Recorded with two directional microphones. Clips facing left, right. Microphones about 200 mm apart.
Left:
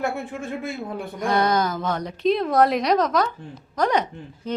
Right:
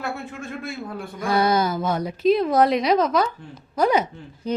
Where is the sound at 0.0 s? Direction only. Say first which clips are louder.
Left 4 dB; 15° left (ahead or behind).